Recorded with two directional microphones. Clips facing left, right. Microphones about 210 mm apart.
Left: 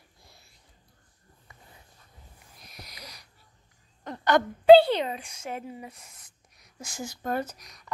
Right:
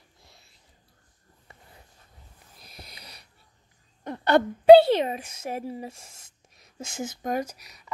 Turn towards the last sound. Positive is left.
turn(degrees=-5)  # may be behind; listen again after turning